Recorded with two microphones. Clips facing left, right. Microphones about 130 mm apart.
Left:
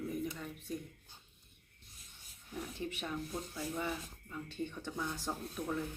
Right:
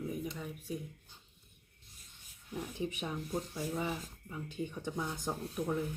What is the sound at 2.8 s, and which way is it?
Speech, 15° right (ahead or behind).